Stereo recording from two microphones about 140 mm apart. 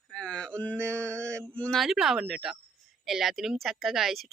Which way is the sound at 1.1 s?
10° left (ahead or behind).